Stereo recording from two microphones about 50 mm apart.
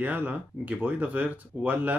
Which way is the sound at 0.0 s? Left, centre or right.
Right.